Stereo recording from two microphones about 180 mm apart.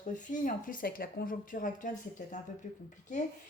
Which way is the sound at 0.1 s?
45° left (ahead or behind).